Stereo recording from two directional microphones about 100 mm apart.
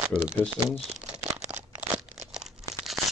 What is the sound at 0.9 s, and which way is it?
Crumpling, 10° right (ahead or behind).